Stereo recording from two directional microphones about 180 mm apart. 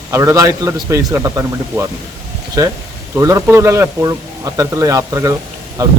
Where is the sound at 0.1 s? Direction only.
15° right (ahead or behind).